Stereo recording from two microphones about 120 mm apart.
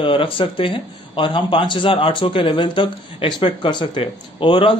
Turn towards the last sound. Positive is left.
turn(degrees=45)  # may be behind; listen again after turning